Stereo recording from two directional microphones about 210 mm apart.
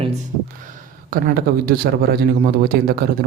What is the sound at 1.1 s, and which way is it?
Speech, 45° right (ahead or behind).